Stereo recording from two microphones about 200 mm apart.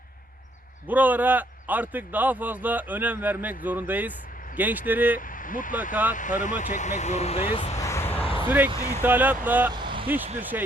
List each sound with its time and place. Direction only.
0.9 s a man's voice: 10° right (ahead or behind)
5.3 s speech: 40° left (ahead or behind)
5.9 s a man's voice: 10° right (ahead or behind)
6.1 s speech: 40° left (ahead or behind)
7.8 s vehicle: 15° left (ahead or behind)
8.2 s vehicle: 25° left (ahead or behind)
8.4 s a man's voice: 10° right (ahead or behind)
9.7 s vehicle: 25° right (ahead or behind)
10.5 s a man's voice: 10° right (ahead or behind)